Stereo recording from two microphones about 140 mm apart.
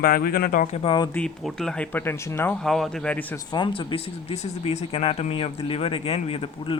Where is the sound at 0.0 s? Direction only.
90° left; by 0.8 s 70° left (ahead or behind).